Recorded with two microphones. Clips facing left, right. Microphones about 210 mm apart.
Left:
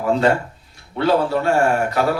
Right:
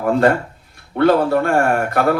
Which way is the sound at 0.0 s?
55° right (ahead or behind).